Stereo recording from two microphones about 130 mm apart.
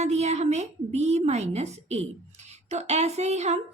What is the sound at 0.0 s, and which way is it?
A woman's voice, 60° right (ahead or behind).